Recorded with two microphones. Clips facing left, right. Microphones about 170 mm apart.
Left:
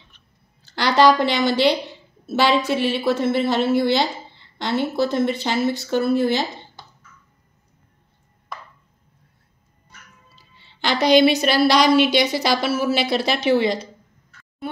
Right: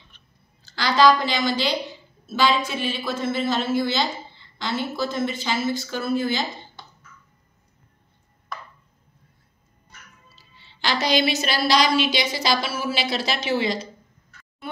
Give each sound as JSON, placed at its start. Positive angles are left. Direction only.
{"t": 0.7, "sound": "a woman's voice", "side_deg": 65}
{"t": 10.3, "sound": "music", "side_deg": 55}
{"t": 11.4, "sound": "a woman's voice", "side_deg": 60}